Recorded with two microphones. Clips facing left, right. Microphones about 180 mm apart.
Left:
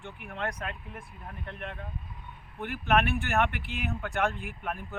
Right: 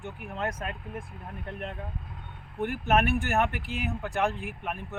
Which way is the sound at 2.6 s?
45° right (ahead or behind).